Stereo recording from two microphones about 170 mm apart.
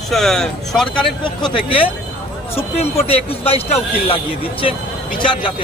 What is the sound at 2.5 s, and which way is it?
A man's voice, 35° left (ahead or behind).